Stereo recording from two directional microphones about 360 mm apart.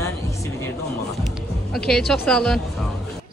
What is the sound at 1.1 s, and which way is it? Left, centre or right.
Music, centre.